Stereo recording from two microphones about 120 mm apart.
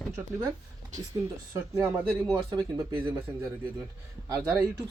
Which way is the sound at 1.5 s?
15° right (ahead or behind).